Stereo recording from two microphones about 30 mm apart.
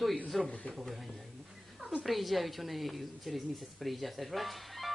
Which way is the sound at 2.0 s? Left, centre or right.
Centre.